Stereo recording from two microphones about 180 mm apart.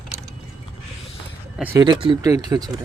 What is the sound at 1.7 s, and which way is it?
Speech, 25° right (ahead or behind).